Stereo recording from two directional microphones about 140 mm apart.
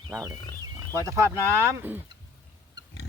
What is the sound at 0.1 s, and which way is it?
Speech, 25° right (ahead or behind).